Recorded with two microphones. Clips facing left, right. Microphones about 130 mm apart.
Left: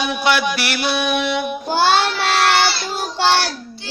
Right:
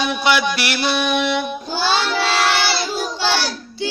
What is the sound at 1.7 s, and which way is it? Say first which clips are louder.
Child singing: left 5 dB; 60° left (ahead or behind).